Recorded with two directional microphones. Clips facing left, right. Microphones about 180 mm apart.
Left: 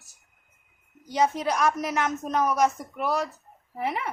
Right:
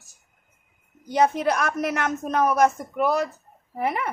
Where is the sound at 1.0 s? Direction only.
55° right (ahead or behind).